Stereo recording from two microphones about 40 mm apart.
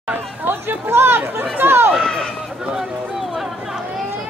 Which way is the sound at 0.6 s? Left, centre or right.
Right.